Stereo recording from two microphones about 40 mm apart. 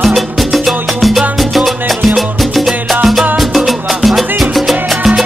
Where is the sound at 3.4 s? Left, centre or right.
Centre.